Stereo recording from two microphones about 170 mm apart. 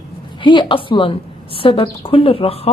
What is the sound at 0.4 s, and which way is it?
A woman's voice, 30° left (ahead or behind).